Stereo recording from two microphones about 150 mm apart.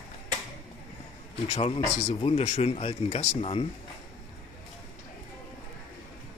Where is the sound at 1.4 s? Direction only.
40° left (ahead or behind).